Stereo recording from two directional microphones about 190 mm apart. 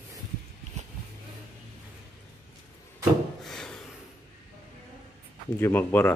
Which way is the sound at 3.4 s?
Centre (ahead or behind).